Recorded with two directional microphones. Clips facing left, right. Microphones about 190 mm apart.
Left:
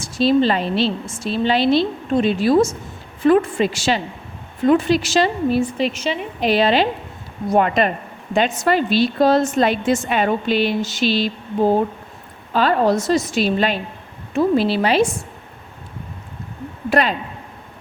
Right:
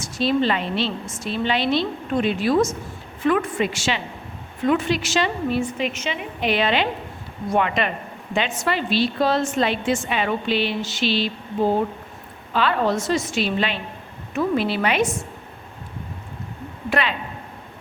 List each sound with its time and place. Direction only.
0.0 s a woman's voice: 30° left (ahead or behind)
12.5 s a woman's voice: 40° left (ahead or behind)
16.9 s speech: 40° left (ahead or behind)